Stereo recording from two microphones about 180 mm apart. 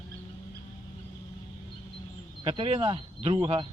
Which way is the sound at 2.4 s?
30° right (ahead or behind).